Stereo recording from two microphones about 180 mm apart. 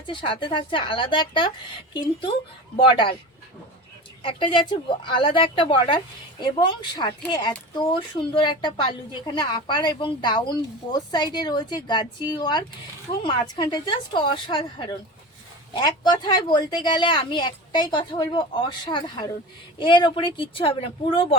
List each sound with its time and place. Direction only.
0.1 s speech: 25° left (ahead or behind)
4.2 s speech: 30° left (ahead or behind)